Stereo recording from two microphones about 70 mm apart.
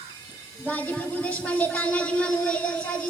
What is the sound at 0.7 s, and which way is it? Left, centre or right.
A child's voice, left.